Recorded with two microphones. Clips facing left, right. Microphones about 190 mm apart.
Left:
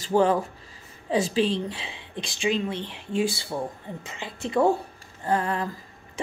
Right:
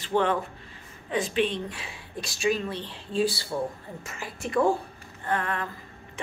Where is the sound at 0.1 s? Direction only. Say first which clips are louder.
Left 4 dB; 35° left (ahead or behind).